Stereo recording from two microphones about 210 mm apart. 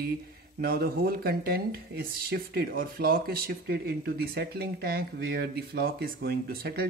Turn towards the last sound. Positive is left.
turn(degrees=-45)  # may be behind; listen again after turning